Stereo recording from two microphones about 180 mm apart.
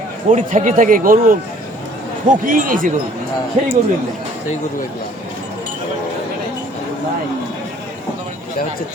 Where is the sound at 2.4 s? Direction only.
50° right (ahead or behind).